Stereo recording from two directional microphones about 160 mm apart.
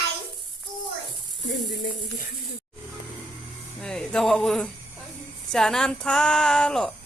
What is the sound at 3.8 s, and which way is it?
Speech, 5° left (ahead or behind).